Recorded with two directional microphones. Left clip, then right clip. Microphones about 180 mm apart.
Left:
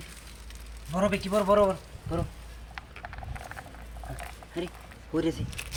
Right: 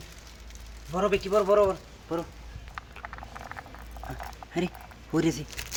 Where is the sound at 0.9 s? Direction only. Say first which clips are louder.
Right 2 dB; 10° right (ahead or behind).